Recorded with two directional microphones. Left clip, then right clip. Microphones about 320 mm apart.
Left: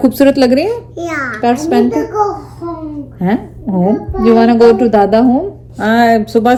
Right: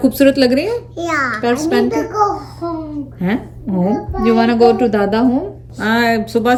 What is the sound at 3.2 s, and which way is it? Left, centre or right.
A woman's voice, centre.